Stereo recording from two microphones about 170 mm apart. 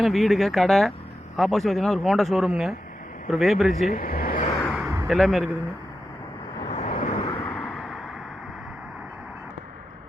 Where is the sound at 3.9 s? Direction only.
60° left (ahead or behind).